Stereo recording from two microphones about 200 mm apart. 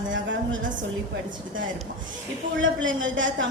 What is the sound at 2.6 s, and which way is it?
Speech, 75° right (ahead or behind).